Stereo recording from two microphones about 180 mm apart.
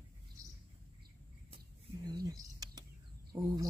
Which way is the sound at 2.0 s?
25° right (ahead or behind).